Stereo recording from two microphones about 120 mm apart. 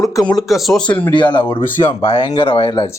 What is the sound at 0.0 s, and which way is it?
Speech, 30° left (ahead or behind).